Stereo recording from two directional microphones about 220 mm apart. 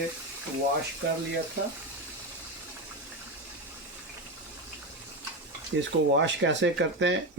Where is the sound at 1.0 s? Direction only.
50° right (ahead or behind).